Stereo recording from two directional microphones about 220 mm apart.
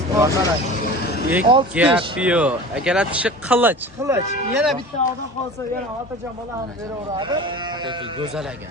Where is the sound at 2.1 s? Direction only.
5° right (ahead or behind).